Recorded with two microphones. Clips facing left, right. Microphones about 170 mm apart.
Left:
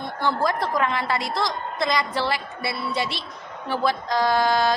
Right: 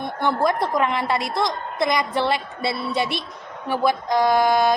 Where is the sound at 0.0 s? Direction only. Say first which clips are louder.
Right 3 dB; 20° right (ahead or behind).